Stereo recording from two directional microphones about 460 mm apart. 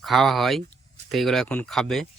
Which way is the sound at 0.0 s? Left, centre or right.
Centre.